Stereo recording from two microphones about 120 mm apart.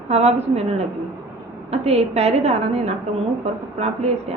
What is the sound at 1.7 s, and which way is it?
A woman's voice, 65° right (ahead or behind).